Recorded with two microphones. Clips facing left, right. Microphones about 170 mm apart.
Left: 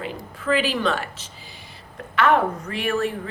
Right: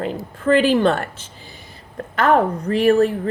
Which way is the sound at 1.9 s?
40° right (ahead or behind).